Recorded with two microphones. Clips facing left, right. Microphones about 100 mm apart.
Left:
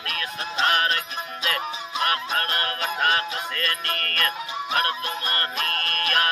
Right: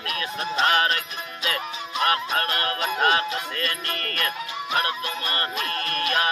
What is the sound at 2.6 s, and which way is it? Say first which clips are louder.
Music: right 2 dB; 20° right (ahead or behind).